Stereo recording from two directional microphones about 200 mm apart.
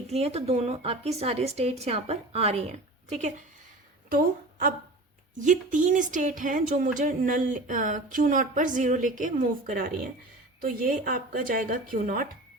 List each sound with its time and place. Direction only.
0.1 s speech: 30° right (ahead or behind)
4.1 s a woman's voice: 45° right (ahead or behind)